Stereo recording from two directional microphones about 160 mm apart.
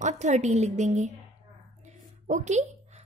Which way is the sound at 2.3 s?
45° right (ahead or behind).